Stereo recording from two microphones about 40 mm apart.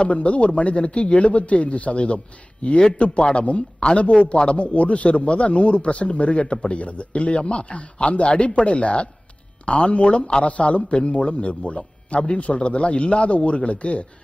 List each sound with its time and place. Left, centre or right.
0.0 s a man's voice: left